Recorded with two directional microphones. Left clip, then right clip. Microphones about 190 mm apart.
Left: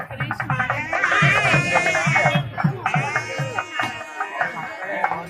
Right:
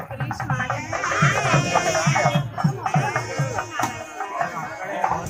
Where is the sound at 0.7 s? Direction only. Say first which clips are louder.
Left 6 dB; 10° right (ahead or behind).